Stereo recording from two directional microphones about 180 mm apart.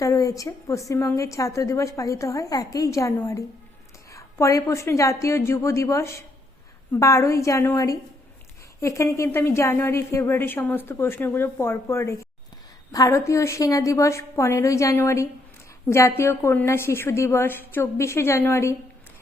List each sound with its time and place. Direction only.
0.0 s a woman's voice: 20° left (ahead or behind)